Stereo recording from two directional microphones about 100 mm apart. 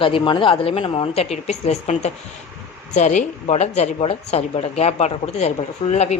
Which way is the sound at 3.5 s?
90° left.